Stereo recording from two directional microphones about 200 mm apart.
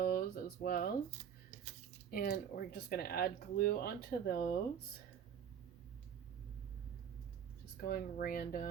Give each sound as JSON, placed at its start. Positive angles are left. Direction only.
{"t": 0.0, "sound": "a sound", "side_deg": 50}
{"t": 2.0, "sound": "speech", "side_deg": 50}
{"t": 7.9, "sound": "speech", "side_deg": 45}